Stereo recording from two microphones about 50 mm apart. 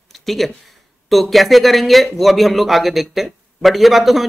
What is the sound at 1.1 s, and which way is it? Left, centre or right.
A man's voice, centre.